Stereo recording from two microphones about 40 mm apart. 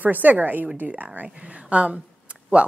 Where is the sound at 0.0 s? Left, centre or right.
Right.